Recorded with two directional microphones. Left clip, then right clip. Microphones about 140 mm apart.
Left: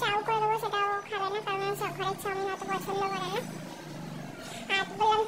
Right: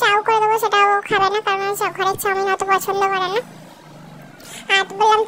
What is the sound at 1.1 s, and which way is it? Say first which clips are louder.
Speech: right 14 dB; 90° right.